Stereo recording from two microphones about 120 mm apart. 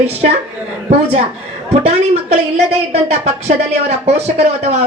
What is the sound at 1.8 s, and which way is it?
Speech, 60° right (ahead or behind).